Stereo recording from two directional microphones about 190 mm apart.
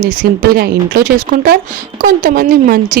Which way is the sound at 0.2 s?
55° right (ahead or behind).